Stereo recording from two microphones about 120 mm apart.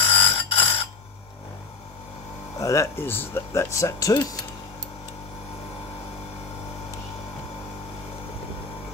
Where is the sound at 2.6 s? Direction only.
25° left (ahead or behind).